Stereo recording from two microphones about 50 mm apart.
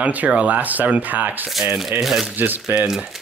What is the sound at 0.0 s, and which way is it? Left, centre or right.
Speech, right.